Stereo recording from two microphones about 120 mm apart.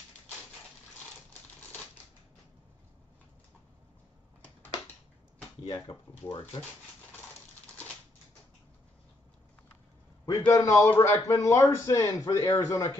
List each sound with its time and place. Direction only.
5.8 s speech: 30° left (ahead or behind)
10.2 s speech: 25° left (ahead or behind)